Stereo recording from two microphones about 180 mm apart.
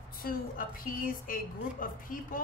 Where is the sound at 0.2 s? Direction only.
50° left (ahead or behind).